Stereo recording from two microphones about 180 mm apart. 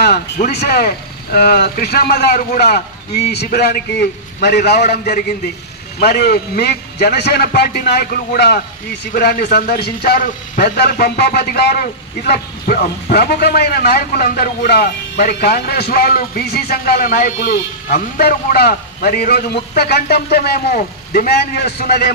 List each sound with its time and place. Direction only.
0.5 s a man's voice: 65° left (ahead or behind)